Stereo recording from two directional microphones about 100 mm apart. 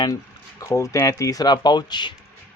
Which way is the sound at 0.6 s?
30° left (ahead or behind).